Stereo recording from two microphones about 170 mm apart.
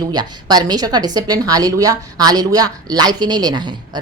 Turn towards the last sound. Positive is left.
turn(degrees=-25)  # may be behind; listen again after turning